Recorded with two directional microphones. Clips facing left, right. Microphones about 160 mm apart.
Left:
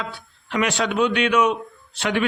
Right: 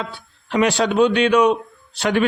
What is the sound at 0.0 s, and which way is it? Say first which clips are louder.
A man's voice: right 2 dB; 35° right (ahead or behind).